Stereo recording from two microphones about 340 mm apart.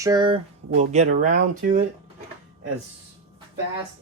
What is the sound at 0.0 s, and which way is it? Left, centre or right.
Speech, centre.